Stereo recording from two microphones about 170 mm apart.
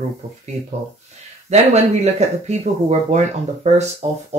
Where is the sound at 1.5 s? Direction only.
40° right (ahead or behind).